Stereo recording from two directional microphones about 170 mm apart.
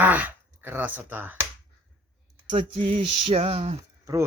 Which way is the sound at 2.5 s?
30° right (ahead or behind).